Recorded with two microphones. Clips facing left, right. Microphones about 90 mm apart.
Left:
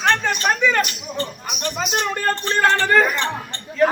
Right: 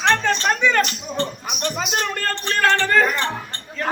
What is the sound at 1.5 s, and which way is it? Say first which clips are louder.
Speech: even; centre (ahead or behind).